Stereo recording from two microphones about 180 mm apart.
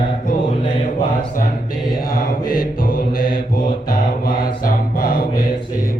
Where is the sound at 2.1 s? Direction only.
55° left (ahead or behind).